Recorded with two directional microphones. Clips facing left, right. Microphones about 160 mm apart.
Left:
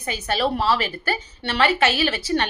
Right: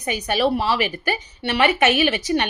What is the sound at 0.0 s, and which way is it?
A woman's voice, 15° right (ahead or behind).